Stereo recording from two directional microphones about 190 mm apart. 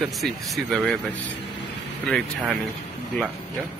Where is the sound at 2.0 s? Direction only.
Centre (ahead or behind).